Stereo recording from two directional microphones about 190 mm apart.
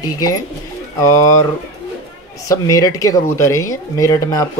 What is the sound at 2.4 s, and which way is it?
Speech, 15° left (ahead or behind).